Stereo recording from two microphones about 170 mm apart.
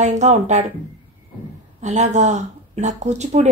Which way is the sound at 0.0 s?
45° right (ahead or behind).